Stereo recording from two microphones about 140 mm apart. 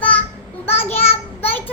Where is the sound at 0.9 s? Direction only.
45° left (ahead or behind).